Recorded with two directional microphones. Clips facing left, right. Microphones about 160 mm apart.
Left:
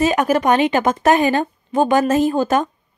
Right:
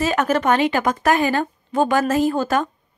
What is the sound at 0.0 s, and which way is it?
A woman's voice, 15° left (ahead or behind).